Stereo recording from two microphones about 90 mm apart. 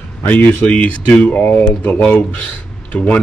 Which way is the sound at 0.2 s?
20° left (ahead or behind).